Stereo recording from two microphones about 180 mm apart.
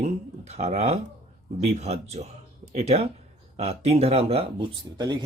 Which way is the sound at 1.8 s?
35° right (ahead or behind).